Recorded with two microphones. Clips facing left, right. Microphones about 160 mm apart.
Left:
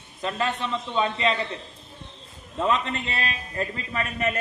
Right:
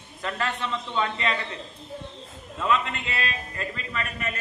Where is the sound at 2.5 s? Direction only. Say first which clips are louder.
Left 1 dB; 35° left (ahead or behind).